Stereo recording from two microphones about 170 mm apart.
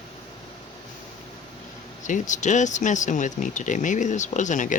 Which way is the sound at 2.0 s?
45° left (ahead or behind).